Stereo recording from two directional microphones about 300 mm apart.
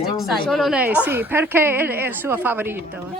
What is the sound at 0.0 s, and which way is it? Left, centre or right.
A woman's voice, centre.